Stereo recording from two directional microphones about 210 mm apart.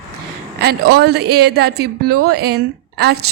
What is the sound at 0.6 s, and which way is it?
Speech, 50° right (ahead or behind).